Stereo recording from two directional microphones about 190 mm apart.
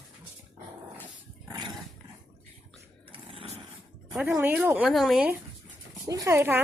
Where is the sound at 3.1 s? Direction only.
30° right (ahead or behind).